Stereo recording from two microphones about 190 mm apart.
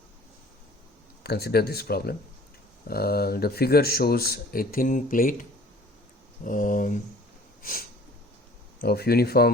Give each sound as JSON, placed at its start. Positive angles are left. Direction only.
{"t": 1.2, "sound": "speech", "side_deg": 55}
{"t": 7.6, "sound": "a sound", "side_deg": 50}
{"t": 8.8, "sound": "speech", "side_deg": 55}